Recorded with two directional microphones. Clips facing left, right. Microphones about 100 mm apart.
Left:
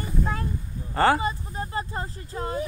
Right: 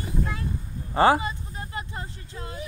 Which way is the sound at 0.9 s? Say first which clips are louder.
Right 2 dB; 15° right (ahead or behind).